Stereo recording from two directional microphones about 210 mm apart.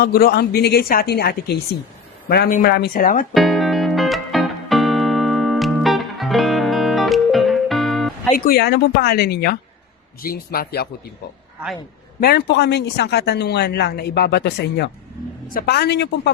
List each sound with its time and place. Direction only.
0.0 s speech: 45° left (ahead or behind)
3.3 s music: centre (ahead or behind)
8.4 s speech: 50° left (ahead or behind)
12.2 s speech: 50° left (ahead or behind)